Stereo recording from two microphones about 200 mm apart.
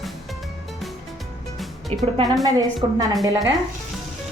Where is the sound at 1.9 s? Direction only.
30° right (ahead or behind).